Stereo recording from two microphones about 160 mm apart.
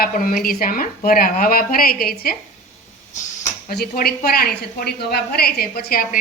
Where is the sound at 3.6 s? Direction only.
70° left (ahead or behind).